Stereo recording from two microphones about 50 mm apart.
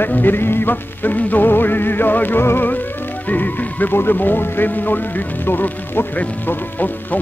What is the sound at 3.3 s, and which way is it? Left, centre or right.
Speech, left.